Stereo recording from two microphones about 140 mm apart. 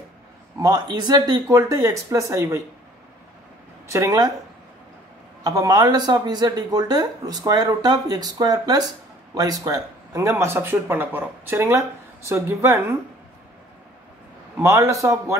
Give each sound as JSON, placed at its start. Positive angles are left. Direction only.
{"t": 0.6, "sound": "speech", "side_deg": -30}
{"t": 3.8, "sound": "speech", "side_deg": -20}
{"t": 5.4, "sound": "speech", "side_deg": -25}
{"t": 14.6, "sound": "speech", "side_deg": -20}